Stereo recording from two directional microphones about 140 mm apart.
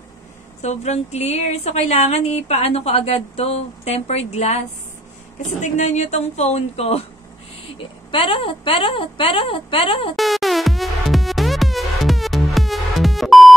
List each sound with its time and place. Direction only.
0.6 s a woman's voice: 55° left (ahead or behind)
8.1 s a woman's voice: 40° left (ahead or behind)
10.1 s music: centre (ahead or behind)